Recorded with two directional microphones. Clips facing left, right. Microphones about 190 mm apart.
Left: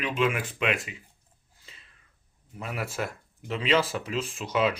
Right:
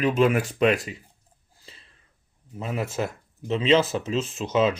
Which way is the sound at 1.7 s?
35° right (ahead or behind).